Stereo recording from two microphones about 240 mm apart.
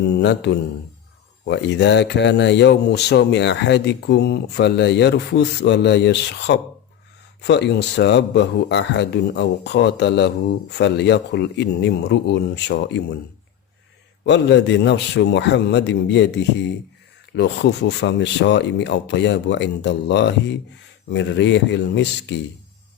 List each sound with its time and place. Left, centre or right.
0.0 s a man's voice: left
14.3 s a man's voice: left